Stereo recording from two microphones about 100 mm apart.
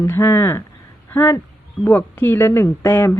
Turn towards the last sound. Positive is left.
turn(degrees=25)  # may be behind; listen again after turning